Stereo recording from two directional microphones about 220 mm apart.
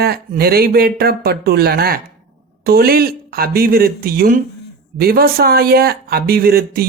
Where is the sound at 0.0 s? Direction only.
45° right (ahead or behind).